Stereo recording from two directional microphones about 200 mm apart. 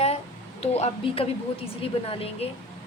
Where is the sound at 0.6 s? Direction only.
30° left (ahead or behind).